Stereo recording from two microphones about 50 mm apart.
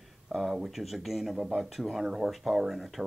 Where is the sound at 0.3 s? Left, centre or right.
Centre.